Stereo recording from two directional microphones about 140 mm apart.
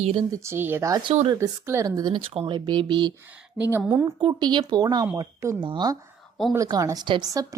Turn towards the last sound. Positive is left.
turn(degrees=-30)  # may be behind; listen again after turning